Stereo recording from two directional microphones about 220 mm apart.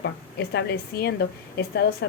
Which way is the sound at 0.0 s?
50° left (ahead or behind).